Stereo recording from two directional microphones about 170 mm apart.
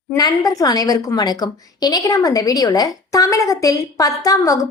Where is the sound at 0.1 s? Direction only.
20° left (ahead or behind).